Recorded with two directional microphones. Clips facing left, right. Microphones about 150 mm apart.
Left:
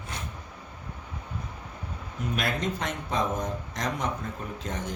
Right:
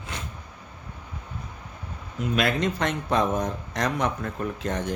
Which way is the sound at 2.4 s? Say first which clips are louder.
Right 6 dB; 75° right (ahead or behind).